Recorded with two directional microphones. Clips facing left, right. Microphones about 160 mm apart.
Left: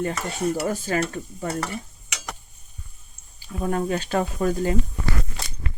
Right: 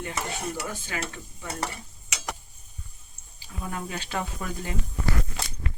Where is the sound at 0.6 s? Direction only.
40° left (ahead or behind).